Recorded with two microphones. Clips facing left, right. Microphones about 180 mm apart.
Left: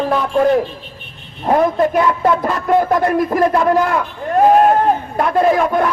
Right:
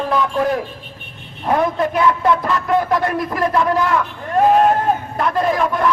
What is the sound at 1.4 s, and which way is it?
A man's voice, 45° left (ahead or behind).